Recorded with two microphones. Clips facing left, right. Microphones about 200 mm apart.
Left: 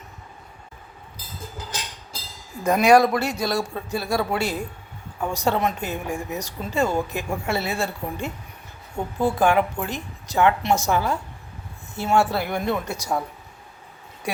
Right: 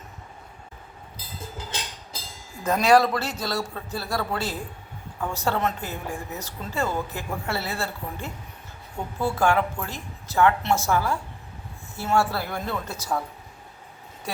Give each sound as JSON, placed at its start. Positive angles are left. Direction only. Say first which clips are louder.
{"t": 2.6, "sound": "speech", "louder": "left 3 dB", "side_deg": 15}